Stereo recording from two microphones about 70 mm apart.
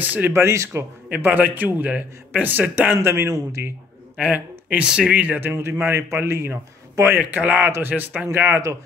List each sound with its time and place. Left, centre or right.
0.0 s a man's voice: right
0.3 s a man's voice: right
1.0 s a man's voice: right
4.2 s a man's voice: centre
5.5 s a man's voice: right
7.2 s a man's voice: right
7.9 s a man's voice: centre
8.3 s a man's voice: right